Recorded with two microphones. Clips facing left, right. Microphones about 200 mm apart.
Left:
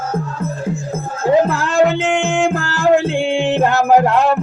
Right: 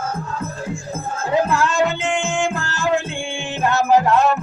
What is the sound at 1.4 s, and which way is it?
Music, 60° left (ahead or behind).